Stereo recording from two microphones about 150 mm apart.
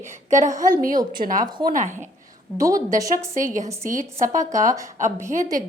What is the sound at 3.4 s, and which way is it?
Speech, 60° right (ahead or behind).